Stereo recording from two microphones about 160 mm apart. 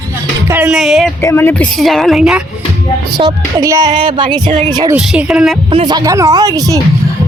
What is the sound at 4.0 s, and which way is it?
Speech, 30° right (ahead or behind).